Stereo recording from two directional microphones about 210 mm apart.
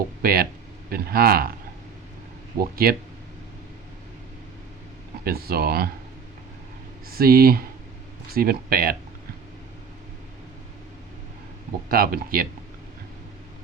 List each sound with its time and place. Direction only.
0.2 s speech: 45° right (ahead or behind)
2.6 s speech: 45° right (ahead or behind)
5.2 s speech: 45° right (ahead or behind)
7.1 s speech: 45° right (ahead or behind)
11.9 s speech: 45° right (ahead or behind)